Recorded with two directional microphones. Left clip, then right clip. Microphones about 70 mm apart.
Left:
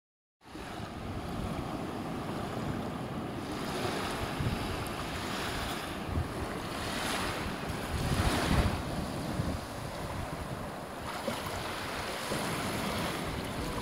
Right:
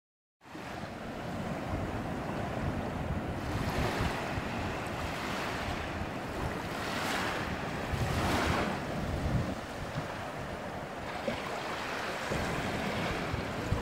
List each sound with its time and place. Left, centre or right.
6.9 s waves: left
12.3 s vehicle: left